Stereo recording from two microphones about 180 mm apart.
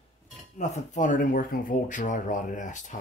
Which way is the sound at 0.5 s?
40° left (ahead or behind).